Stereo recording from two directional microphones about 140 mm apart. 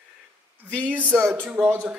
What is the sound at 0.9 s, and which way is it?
Speech, 10° right (ahead or behind).